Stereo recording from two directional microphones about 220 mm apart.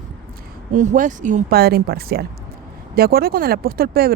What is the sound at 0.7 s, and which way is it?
Speech, 35° right (ahead or behind).